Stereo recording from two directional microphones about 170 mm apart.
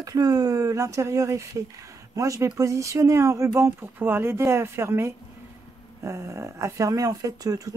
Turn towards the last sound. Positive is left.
turn(degrees=-20)  # may be behind; listen again after turning